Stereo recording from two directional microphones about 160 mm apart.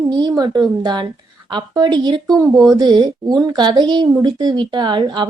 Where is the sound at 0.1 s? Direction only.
25° right (ahead or behind).